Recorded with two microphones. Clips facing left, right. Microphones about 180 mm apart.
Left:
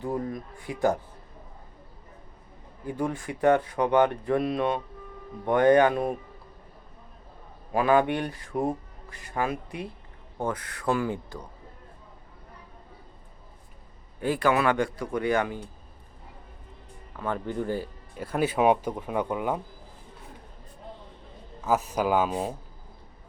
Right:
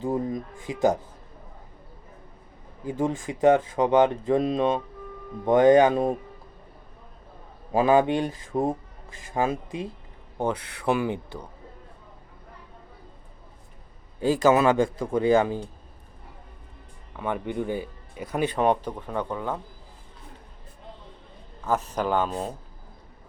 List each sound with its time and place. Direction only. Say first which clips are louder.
0.0 s speech: right 3 dB; 20° right (ahead or behind)
2.8 s speech: right 3 dB; 20° right (ahead or behind)
7.7 s speech: right 3 dB; 25° right (ahead or behind)
14.5 s speech: right 4 dB; 25° right (ahead or behind)
17.2 s speech: right 1 dB; 15° right (ahead or behind)
18.2 s speech: left 1 dB; 5° left (ahead or behind)
21.6 s speech: left 1 dB; 5° left (ahead or behind)